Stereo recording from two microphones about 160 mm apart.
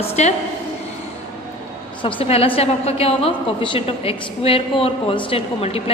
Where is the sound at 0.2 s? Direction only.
45° left (ahead or behind).